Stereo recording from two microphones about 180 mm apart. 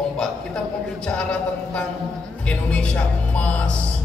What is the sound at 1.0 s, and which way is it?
A man's voice, 5° left (ahead or behind).